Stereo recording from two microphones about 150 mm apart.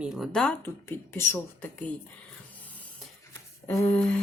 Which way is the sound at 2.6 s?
10° left (ahead or behind).